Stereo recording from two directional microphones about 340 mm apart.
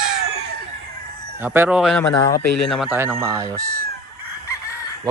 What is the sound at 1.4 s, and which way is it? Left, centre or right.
Speech, centre.